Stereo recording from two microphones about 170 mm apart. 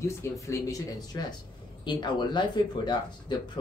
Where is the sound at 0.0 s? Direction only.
15° left (ahead or behind).